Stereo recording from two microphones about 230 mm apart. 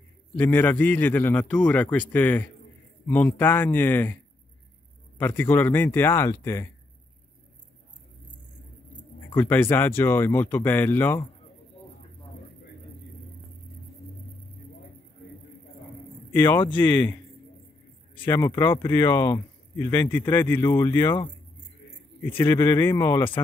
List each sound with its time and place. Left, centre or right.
0.4 s a man's voice: centre
9.3 s a man's voice: centre
16.3 s a man's voice: centre
18.2 s speech: centre
20.1 s a man's voice: centre